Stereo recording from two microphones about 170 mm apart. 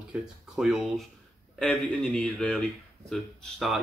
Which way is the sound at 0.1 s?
Centre (ahead or behind).